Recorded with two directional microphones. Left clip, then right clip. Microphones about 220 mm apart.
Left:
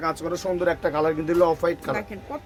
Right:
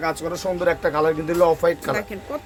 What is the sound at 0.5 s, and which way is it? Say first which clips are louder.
Speech: right 3 dB; 5° right (ahead or behind).